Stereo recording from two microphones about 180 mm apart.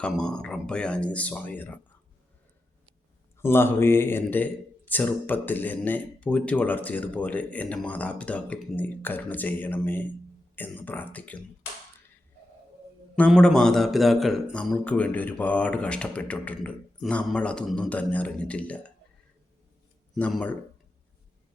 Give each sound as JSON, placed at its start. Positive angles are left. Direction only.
{"t": 0.0, "sound": "speech", "side_deg": 5}
{"t": 3.3, "sound": "a man's voice", "side_deg": 15}
{"t": 13.1, "sound": "a man's voice", "side_deg": 5}
{"t": 20.1, "sound": "a man's voice", "side_deg": 10}